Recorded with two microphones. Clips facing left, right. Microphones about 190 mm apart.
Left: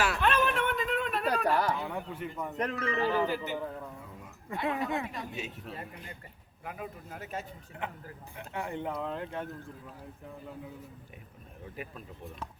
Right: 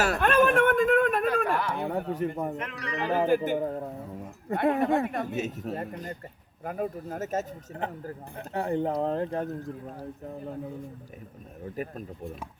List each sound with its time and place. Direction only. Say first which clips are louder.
0.0 s a sound: right 6 dB; 45° right (ahead or behind)
1.5 s chatter: left 1 dB; 40° left (ahead or behind)
1.9 s a sound: right 8 dB; 45° right (ahead or behind)
2.7 s speech: right 1 dB; 40° right (ahead or behind)
4.5 s speech: right 8 dB; 55° right (ahead or behind)
11.6 s speech: right 8 dB; 45° right (ahead or behind)